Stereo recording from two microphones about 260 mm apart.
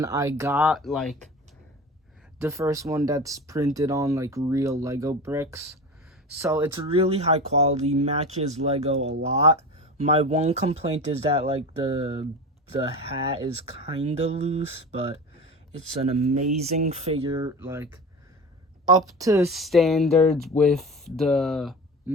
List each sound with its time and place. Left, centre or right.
0.0 s speech: centre
2.4 s speech: centre
6.8 s speech: right
19.5 s speech: centre